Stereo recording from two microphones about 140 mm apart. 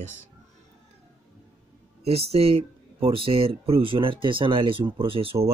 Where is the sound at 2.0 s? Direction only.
45° right (ahead or behind).